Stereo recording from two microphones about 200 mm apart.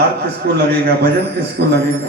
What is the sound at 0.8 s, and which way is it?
Music, 55° right (ahead or behind).